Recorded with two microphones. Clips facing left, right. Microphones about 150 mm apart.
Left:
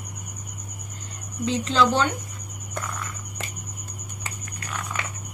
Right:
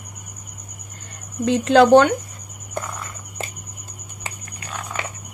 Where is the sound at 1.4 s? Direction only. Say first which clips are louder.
Right 8 dB; 60° right (ahead or behind).